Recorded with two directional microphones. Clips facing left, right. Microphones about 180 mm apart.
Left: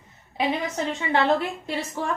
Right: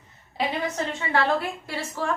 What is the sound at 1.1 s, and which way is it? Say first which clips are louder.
Speech: left 2 dB; 20° left (ahead or behind).